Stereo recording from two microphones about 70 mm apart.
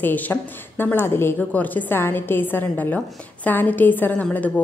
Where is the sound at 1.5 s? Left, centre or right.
Left.